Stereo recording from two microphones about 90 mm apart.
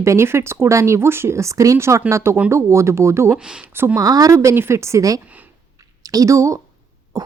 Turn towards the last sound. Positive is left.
turn(degrees=-40)  # may be behind; listen again after turning